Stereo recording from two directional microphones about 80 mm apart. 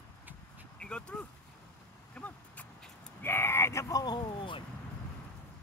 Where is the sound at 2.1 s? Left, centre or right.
Centre.